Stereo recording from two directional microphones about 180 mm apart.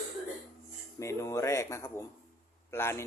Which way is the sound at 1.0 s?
15° left (ahead or behind).